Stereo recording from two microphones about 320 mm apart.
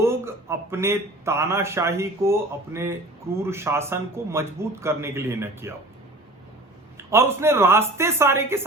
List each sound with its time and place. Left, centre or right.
0.0 s speech: centre
6.9 s speech: centre